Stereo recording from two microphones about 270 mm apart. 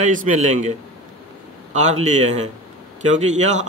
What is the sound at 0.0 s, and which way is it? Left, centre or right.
A man's voice, right.